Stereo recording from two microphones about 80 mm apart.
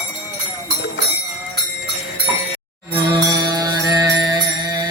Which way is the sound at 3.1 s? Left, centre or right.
Right.